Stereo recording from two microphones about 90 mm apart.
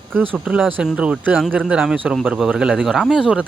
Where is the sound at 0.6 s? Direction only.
10° right (ahead or behind).